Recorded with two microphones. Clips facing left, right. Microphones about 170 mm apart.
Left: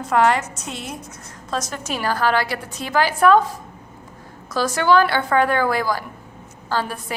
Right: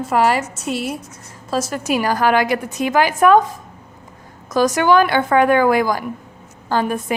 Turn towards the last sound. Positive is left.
turn(degrees=-20)  # may be behind; listen again after turning